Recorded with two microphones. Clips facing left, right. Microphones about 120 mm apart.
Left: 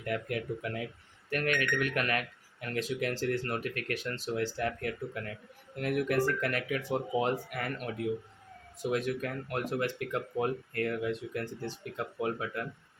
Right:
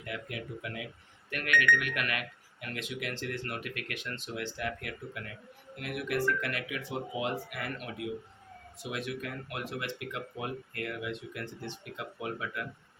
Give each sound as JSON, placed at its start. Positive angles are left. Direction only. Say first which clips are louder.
{"t": 0.0, "sound": "speech", "louder": "left 6 dB", "side_deg": 45}
{"t": 8.8, "sound": "speech", "louder": "left 6 dB", "side_deg": 45}